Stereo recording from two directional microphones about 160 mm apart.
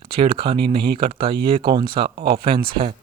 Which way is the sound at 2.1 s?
70° right (ahead or behind).